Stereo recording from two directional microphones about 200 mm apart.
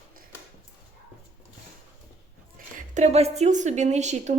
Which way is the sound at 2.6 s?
40° right (ahead or behind).